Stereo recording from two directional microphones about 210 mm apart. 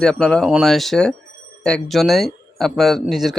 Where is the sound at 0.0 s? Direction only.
5° left (ahead or behind).